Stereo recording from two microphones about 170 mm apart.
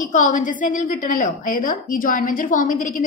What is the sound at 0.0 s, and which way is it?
A woman's voice, 50° left (ahead or behind).